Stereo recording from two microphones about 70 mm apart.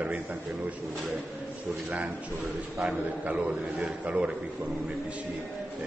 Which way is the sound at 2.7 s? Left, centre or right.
Centre.